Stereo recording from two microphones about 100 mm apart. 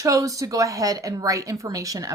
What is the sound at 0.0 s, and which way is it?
Speech, 35° right (ahead or behind).